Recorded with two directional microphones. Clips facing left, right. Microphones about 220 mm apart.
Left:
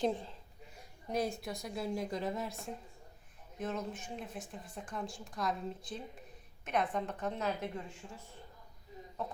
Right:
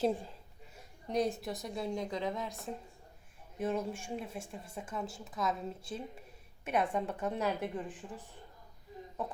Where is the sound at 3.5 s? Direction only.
10° right (ahead or behind).